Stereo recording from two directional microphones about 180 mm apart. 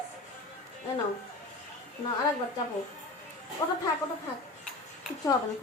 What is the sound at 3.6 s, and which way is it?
Speech, 20° left (ahead or behind).